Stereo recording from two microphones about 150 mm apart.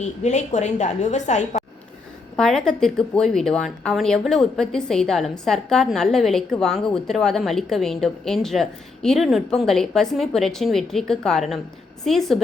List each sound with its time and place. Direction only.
0.0 s a woman's voice: 50° left (ahead or behind)
2.3 s a woman's voice: 5° left (ahead or behind)